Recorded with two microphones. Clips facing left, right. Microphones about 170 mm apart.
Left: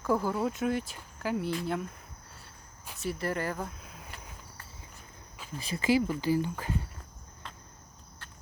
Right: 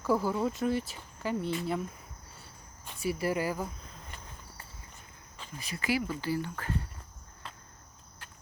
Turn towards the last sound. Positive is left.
turn(degrees=15)  # may be behind; listen again after turning